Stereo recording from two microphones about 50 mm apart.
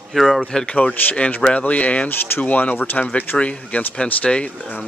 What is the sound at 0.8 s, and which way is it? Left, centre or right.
Speech, left.